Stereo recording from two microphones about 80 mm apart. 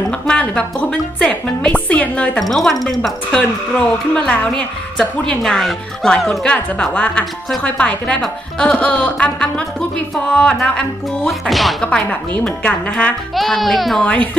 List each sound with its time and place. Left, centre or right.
0.1 s a woman's voice: centre
2.4 s speech: centre
4.1 s a woman's voice: centre
11.8 s a woman's voice: centre
13.3 s speech: centre
14.0 s a woman's voice: centre